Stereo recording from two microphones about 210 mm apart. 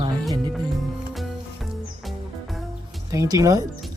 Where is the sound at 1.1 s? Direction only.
Centre (ahead or behind).